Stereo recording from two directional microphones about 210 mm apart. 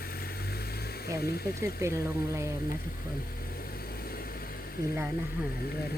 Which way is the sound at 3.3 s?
45° left (ahead or behind).